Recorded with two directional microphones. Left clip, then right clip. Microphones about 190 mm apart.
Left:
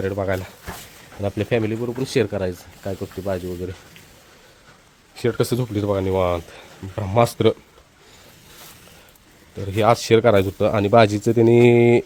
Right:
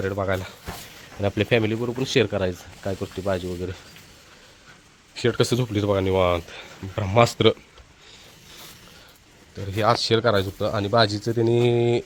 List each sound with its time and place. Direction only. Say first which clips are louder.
0.0 s speech: left 2 dB; 20° left (ahead or behind)
1.2 s speech: right 1 dB; centre (ahead or behind)
5.1 s speech: even; 15° left (ahead or behind)
9.6 s speech: left 4 dB; 40° left (ahead or behind)